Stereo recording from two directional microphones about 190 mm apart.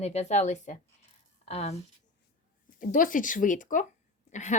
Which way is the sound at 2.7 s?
45° left (ahead or behind).